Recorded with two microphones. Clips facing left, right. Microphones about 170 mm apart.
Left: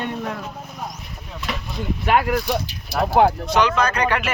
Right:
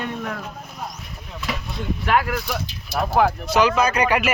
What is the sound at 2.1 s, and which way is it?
Speech, 20° left (ahead or behind).